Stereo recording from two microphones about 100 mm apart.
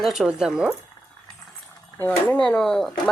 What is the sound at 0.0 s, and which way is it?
Speech, 5° right (ahead or behind).